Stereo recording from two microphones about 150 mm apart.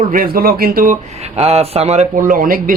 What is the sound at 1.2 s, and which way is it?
Speech, 45° right (ahead or behind).